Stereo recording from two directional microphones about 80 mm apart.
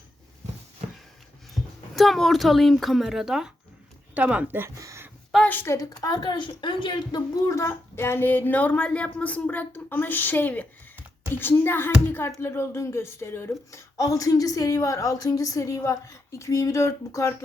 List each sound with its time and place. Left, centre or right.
2.0 s speech: centre
4.1 s speech: centre
4.8 s a sound: right
5.6 s a woman's voice: left
7.4 s speech: left
13.5 s a woman's voice: left